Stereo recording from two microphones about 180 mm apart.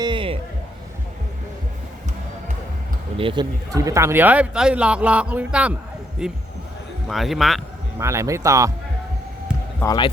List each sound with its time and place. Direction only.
0.0 s music: 25° right (ahead or behind)
3.2 s speech: 25° right (ahead or behind); by 7.6 s centre (ahead or behind)
7.9 s speech: 15° right (ahead or behind)
9.8 s speech: 25° left (ahead or behind)